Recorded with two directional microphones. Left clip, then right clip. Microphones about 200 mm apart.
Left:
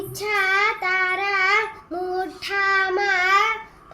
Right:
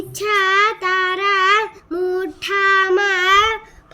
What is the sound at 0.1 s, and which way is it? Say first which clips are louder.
Child singing: right 5 dB; 50° right (ahead or behind).